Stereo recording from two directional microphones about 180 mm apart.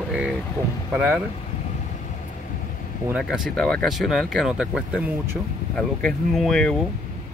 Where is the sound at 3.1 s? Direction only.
5° right (ahead or behind).